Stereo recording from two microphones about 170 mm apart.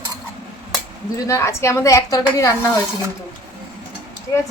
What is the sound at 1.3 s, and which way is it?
A woman's voice, 15° left (ahead or behind).